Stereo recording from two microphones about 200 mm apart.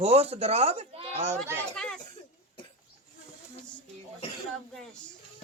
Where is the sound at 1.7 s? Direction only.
5° left (ahead or behind).